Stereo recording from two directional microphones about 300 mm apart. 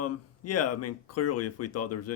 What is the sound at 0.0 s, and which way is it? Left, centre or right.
Speech, left.